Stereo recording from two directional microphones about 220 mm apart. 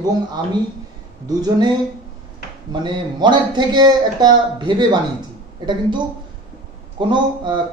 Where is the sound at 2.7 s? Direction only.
20° right (ahead or behind).